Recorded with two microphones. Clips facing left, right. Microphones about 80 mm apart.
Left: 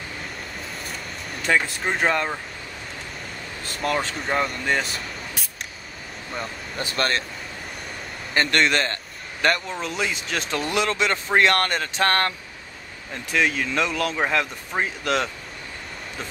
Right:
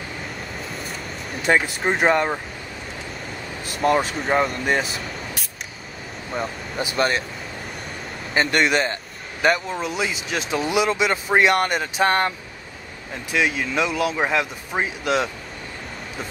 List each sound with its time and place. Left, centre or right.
0.7 s vehicle: centre
1.6 s speech: centre
2.0 s speech: centre
3.6 s speech: centre
4.2 s speech: centre
4.7 s a sound: centre
6.3 s speech: centre
8.4 s a man's voice: centre